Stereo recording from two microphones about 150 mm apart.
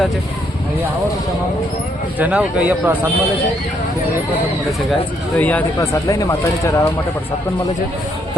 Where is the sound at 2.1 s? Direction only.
10° right (ahead or behind).